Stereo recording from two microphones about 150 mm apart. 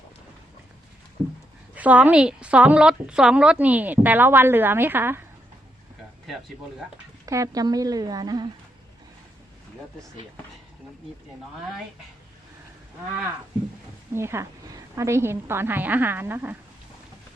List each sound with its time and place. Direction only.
1.7 s a woman's voice: 10° right (ahead or behind)
7.3 s speech: 20° right (ahead or behind)
14.1 s a woman's voice: 15° right (ahead or behind)